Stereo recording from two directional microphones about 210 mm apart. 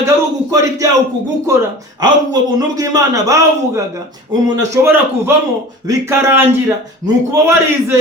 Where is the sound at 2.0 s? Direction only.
20° right (ahead or behind).